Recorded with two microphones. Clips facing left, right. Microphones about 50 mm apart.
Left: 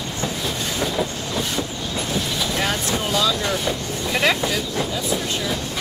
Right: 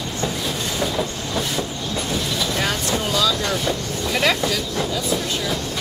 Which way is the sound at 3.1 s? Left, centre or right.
Centre.